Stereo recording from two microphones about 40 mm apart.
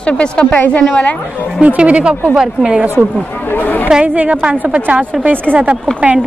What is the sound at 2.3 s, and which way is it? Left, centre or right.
Speech, centre.